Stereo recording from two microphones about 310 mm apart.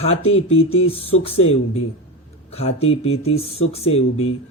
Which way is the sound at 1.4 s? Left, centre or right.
Left.